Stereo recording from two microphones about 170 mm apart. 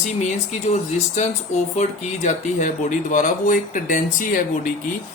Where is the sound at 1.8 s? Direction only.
40° left (ahead or behind).